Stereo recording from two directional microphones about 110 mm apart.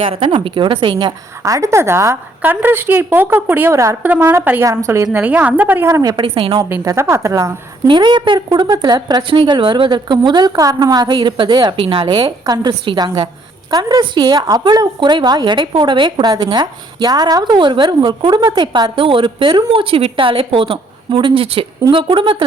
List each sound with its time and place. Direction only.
0.0 s a woman's voice: 50° right (ahead or behind)
1.5 s a woman's voice: 30° right (ahead or behind)
5.0 s a woman's voice: 15° right (ahead or behind); by 6.1 s 30° right (ahead or behind)
6.1 s a woman's voice: 50° right (ahead or behind)
6.8 s a woman's voice: 25° right (ahead or behind)
7.9 s a woman's voice: 45° right (ahead or behind)
13.7 s a woman's voice: 40° right (ahead or behind)